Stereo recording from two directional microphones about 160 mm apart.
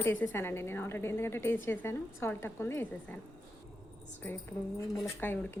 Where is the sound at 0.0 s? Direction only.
10° left (ahead or behind).